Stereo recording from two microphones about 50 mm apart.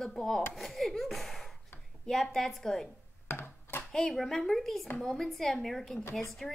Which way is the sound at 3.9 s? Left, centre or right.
Centre.